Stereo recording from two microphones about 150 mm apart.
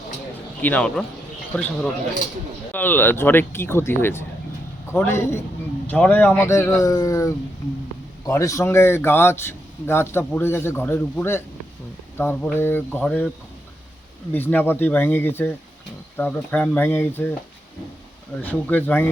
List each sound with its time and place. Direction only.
0.6 s a man's voice: 10° left (ahead or behind)
14.3 s a man's voice: 15° left (ahead or behind)
18.4 s a man's voice: 10° left (ahead or behind)